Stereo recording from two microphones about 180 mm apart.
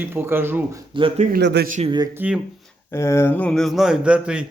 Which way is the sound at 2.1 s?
10° right (ahead or behind).